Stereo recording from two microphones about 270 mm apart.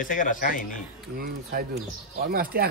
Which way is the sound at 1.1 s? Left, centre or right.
Right.